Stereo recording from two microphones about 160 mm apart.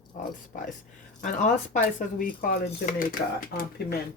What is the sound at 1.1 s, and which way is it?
Speech, 55° left (ahead or behind).